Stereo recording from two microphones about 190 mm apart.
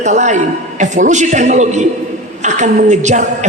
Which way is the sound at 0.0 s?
40° right (ahead or behind).